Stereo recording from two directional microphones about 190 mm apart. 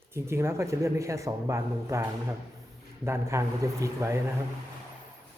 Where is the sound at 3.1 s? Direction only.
15° right (ahead or behind).